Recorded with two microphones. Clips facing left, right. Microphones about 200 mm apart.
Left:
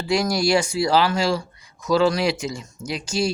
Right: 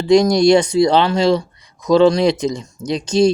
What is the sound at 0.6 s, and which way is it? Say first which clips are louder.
Speech: right 6 dB; 35° right (ahead or behind).